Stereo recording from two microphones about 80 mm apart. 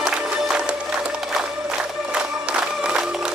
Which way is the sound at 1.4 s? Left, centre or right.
Centre.